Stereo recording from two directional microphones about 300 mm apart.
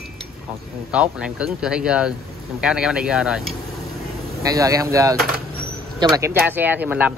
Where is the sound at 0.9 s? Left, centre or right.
Centre.